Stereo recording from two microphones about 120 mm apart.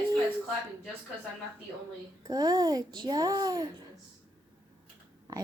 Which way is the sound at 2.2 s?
35° right (ahead or behind).